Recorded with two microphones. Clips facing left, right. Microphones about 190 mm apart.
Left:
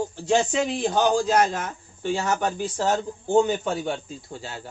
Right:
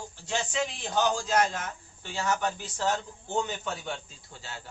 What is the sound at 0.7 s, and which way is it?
A man's voice, 50° left (ahead or behind).